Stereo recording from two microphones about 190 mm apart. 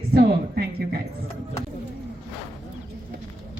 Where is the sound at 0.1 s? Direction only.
55° right (ahead or behind).